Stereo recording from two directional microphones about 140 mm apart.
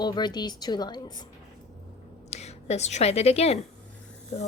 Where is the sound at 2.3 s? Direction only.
50° left (ahead or behind).